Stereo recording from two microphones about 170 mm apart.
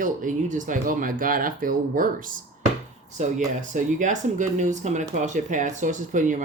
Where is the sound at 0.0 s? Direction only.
50° right (ahead or behind).